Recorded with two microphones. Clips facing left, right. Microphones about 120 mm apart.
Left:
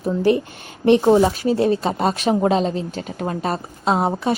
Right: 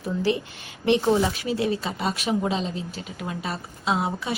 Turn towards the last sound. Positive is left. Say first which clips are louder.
# left 6 dB
turn(degrees=45)  # may be behind; listen again after turning